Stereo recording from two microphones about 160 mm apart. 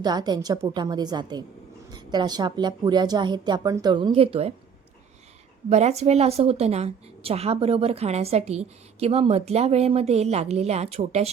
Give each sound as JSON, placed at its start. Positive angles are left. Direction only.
{"t": 0.0, "sound": "a woman's voice", "side_deg": -25}
{"t": 5.6, "sound": "a woman's voice", "side_deg": -45}